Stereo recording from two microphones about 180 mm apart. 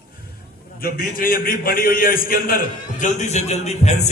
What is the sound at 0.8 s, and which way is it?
A man's voice, 55° left (ahead or behind).